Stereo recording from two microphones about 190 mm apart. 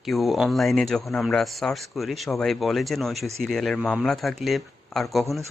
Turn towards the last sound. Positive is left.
turn(degrees=0)  # may be behind; listen again after turning